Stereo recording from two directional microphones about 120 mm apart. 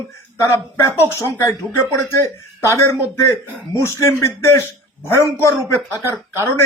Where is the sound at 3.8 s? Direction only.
25° left (ahead or behind).